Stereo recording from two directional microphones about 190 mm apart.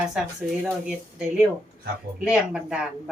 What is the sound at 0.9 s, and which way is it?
Speech, 5° right (ahead or behind).